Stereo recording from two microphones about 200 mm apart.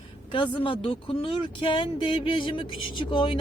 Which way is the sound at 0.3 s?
25° left (ahead or behind).